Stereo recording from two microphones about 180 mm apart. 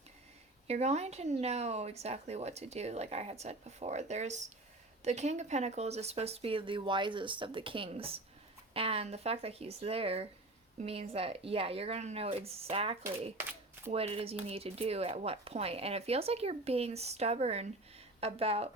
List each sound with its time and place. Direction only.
0.7 s speech: 35° right (ahead or behind)